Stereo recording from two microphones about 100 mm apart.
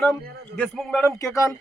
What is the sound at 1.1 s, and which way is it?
Speech, 35° left (ahead or behind).